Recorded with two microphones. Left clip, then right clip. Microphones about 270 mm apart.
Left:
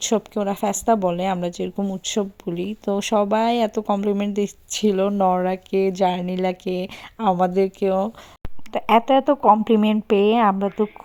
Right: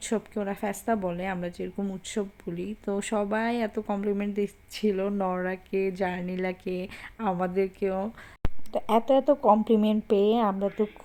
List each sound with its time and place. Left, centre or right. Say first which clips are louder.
0.0 s speech: left 9 dB; left
4.4 s speech: left 7 dB; centre
4.9 s speech: left 9 dB; left